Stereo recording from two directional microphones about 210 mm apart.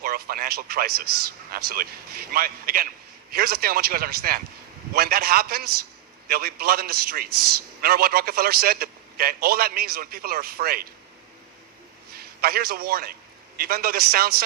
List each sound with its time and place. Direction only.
0.0 s a man's voice: 45° right (ahead or behind)
12.1 s a man's voice: 45° right (ahead or behind)